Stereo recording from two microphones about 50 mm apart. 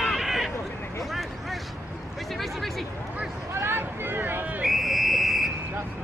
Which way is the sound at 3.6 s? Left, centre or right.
Right.